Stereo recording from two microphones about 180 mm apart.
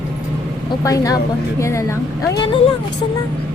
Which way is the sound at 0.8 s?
20° left (ahead or behind).